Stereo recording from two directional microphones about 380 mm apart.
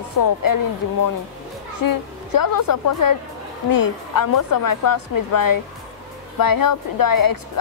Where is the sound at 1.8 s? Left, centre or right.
Left.